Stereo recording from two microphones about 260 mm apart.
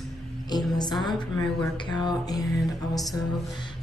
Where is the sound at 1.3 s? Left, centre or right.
Centre.